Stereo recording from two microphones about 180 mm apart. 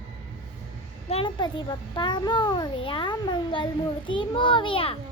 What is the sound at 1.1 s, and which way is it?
A child's voice, 30° left (ahead or behind).